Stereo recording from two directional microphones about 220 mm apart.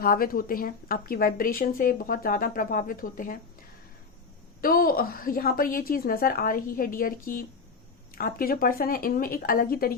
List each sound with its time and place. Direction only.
0.0 s speech: 40° left (ahead or behind)
4.6 s speech: 40° left (ahead or behind)